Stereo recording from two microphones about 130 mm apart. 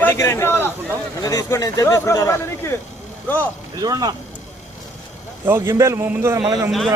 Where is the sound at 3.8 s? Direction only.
30° right (ahead or behind).